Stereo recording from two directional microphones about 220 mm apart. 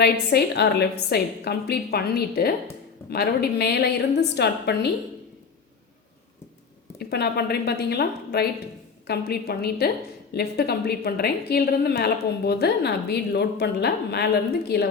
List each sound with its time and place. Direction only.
0.0 s a woman's voice: 45° left (ahead or behind)
7.0 s a woman's voice: 45° left (ahead or behind)